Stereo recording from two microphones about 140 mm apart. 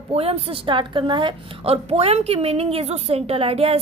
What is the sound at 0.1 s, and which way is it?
A woman's voice, 45° right (ahead or behind).